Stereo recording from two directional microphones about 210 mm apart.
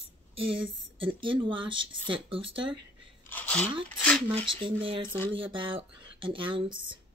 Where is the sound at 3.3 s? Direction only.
10° left (ahead or behind).